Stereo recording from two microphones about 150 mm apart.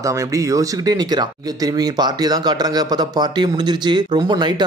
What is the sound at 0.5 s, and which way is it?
Speech, 25° right (ahead or behind).